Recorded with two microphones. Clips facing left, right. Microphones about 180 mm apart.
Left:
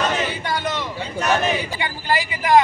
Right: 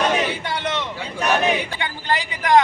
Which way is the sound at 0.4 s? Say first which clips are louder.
Left 1 dB; 5° left (ahead or behind).